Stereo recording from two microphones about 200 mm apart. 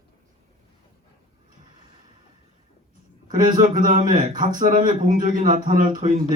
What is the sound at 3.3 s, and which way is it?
Speech, 40° right (ahead or behind).